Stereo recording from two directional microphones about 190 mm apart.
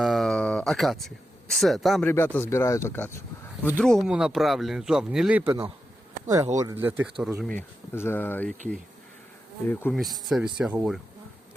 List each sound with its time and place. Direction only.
0.0 s a sound: centre (ahead or behind)
2.0 s speech: 10° left (ahead or behind); by 7.4 s 10° right (ahead or behind)
7.4 s speech: 10° left (ahead or behind)
9.6 s speech: 10° left (ahead or behind)
10.0 s speech: centre (ahead or behind)